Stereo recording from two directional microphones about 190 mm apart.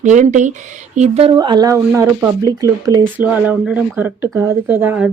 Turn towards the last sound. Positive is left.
turn(degrees=-10)  # may be behind; listen again after turning